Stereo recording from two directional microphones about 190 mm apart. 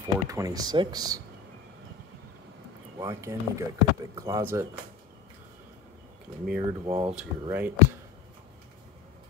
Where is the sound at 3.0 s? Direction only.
15° right (ahead or behind).